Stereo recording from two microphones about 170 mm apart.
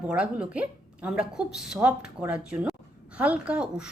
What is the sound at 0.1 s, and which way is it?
A woman's voice, 5° right (ahead or behind).